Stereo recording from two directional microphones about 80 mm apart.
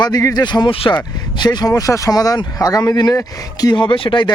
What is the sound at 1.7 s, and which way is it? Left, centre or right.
Speech, left.